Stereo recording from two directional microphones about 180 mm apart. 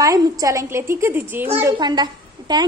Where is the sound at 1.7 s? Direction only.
25° right (ahead or behind).